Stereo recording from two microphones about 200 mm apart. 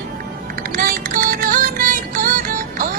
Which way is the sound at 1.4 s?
40° right (ahead or behind).